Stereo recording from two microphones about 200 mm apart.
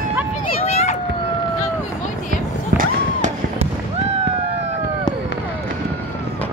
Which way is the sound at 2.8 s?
35° right (ahead or behind).